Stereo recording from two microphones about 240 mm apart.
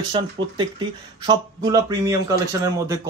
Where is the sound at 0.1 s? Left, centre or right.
Centre.